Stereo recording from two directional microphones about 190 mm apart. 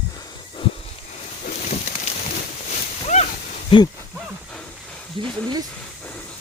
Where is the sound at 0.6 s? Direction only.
30° left (ahead or behind).